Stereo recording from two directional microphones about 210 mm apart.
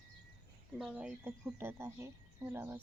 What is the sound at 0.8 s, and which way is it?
Speech, 5° right (ahead or behind).